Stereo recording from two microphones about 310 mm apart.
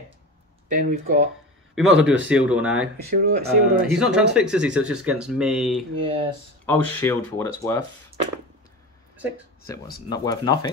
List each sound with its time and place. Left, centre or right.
0.7 s speech: right
1.8 s speech: centre
3.1 s speech: right
3.8 s speech: centre
10.0 s speech: centre